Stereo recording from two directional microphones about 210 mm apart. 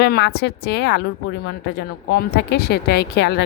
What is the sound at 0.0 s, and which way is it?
A woman's voice, 50° left (ahead or behind).